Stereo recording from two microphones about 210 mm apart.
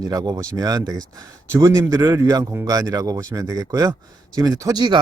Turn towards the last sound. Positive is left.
turn(degrees=-20)  # may be behind; listen again after turning